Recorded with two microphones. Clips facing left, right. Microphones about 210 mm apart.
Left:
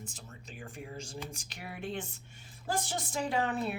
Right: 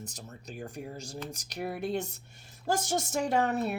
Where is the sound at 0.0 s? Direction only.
40° right (ahead or behind).